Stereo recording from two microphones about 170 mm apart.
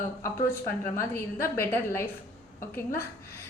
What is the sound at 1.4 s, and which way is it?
Speech, 15° left (ahead or behind).